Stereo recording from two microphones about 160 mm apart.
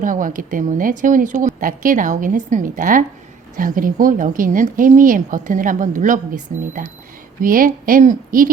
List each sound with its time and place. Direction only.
0.0 s speech: 55° right (ahead or behind)